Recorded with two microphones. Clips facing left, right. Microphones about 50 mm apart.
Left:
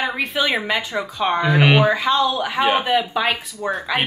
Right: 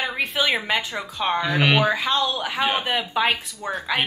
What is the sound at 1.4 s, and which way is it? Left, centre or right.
Speech, centre.